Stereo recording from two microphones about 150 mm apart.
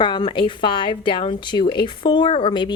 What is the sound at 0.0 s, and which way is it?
A woman's voice, 35° left (ahead or behind).